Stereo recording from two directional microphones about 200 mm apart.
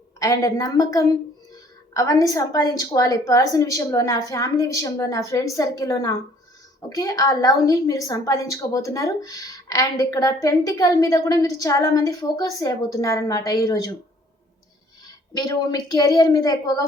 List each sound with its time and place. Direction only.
0.2 s a woman's voice: 15° left (ahead or behind)
15.0 s a woman's voice: 20° left (ahead or behind)